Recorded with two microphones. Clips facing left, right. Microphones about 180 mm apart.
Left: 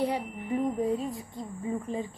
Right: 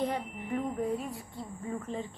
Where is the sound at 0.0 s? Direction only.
15° left (ahead or behind).